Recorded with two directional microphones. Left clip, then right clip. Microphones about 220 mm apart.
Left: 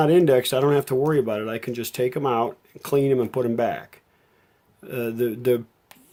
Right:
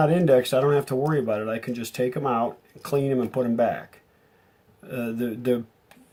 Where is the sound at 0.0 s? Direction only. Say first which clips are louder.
Left 2 dB; 40° left (ahead or behind).